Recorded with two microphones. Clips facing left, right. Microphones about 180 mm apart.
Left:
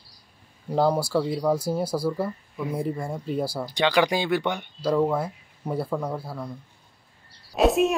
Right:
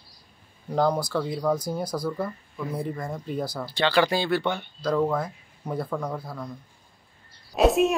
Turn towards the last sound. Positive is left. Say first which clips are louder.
# even
turn(degrees=0)  # may be behind; listen again after turning